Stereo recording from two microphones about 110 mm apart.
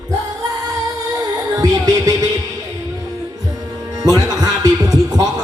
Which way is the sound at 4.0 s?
35° right (ahead or behind).